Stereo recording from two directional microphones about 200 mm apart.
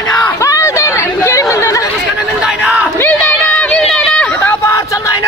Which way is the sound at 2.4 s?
5° right (ahead or behind).